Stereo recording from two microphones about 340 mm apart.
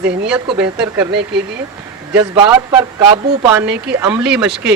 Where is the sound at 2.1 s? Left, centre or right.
Centre.